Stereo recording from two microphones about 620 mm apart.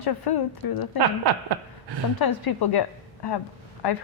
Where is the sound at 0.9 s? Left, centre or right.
Right.